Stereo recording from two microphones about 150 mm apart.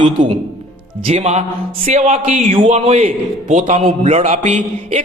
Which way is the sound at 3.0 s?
55° right (ahead or behind).